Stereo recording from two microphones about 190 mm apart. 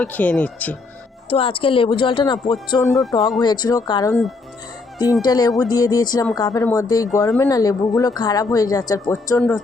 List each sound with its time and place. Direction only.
0.0 s speech: 10° left (ahead or behind)
1.3 s speech: 30° left (ahead or behind)
3.2 s speech: centre (ahead or behind)
3.4 s speech: 20° left (ahead or behind)
5.2 s speech: 20° left (ahead or behind)